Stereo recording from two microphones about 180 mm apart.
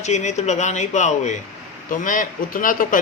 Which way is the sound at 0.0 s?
40° left (ahead or behind).